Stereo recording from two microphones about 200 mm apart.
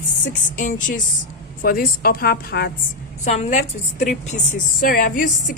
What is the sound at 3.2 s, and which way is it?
A woman's voice, 35° left (ahead or behind).